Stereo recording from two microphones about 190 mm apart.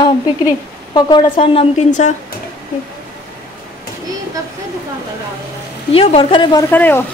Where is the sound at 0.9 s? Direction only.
25° left (ahead or behind); by 2.1 s 40° left (ahead or behind).